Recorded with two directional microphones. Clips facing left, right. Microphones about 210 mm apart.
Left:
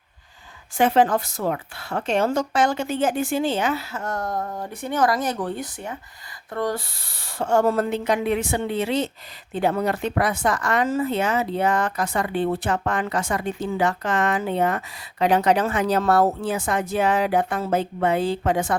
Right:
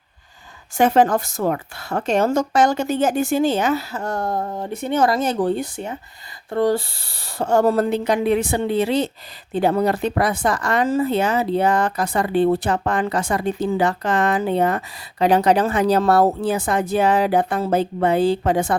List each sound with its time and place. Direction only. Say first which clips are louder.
0.8 s speech: right 3 dB; 45° right (ahead or behind)